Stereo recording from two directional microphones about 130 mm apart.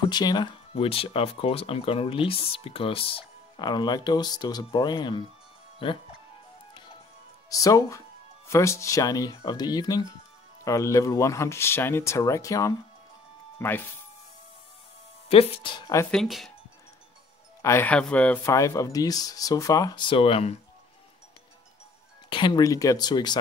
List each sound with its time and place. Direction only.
0.1 s speech: 30° left (ahead or behind)
0.7 s speech: 45° left (ahead or behind)
7.4 s speech: 25° left (ahead or behind)
15.2 s speech: 50° left (ahead or behind)
16.1 s speech: centre (ahead or behind)
17.6 s speech: 20° left (ahead or behind)
17.8 s speech: 10° left (ahead or behind)
18.4 s speech: 25° left (ahead or behind); by 20.5 s 45° left (ahead or behind)
22.3 s speech: 35° left (ahead or behind)